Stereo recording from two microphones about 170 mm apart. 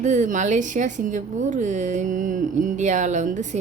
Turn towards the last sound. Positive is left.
turn(degrees=-45)  # may be behind; listen again after turning